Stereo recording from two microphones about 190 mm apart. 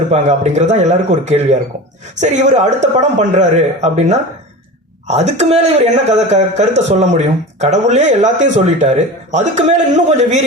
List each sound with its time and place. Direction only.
0.1 s speech: 40° right (ahead or behind)